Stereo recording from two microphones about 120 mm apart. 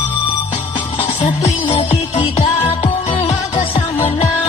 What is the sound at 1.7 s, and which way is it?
Music, 50° left (ahead or behind).